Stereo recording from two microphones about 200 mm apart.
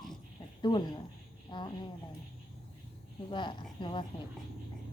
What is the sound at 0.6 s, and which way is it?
A woman's voice, 20° left (ahead or behind).